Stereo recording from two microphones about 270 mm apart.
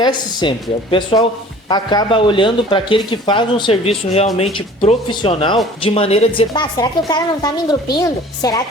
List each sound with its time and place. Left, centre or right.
0.0 s a woman's voice: centre